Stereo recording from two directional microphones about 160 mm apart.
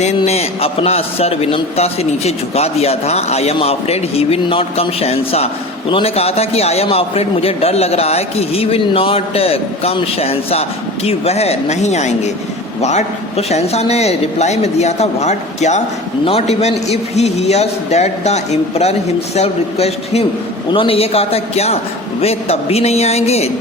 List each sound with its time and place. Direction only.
0.2 s a man's voice: 40° left (ahead or behind)